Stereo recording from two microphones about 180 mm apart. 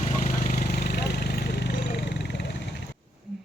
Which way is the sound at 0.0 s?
40° left (ahead or behind).